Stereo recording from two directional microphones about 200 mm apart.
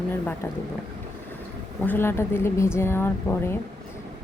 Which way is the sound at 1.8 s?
10° left (ahead or behind).